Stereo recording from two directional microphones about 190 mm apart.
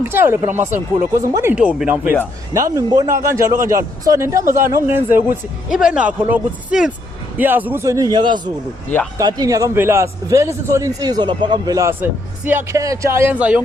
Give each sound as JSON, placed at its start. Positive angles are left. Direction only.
{"t": 0.0, "sound": "a man's voice", "side_deg": -10}
{"t": 2.7, "sound": "a man's voice", "side_deg": -20}